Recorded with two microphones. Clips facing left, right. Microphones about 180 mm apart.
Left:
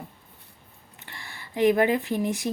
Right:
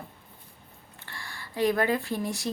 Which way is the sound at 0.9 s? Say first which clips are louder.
Right 1 dB; 20° left (ahead or behind).